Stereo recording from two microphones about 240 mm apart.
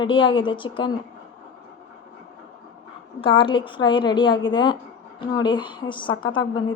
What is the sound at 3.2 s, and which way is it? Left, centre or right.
A woman's voice, left.